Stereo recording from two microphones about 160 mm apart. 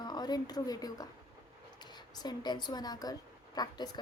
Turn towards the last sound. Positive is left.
turn(degrees=25)  # may be behind; listen again after turning